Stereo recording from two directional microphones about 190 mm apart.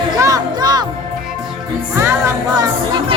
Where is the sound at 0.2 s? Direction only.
20° right (ahead or behind).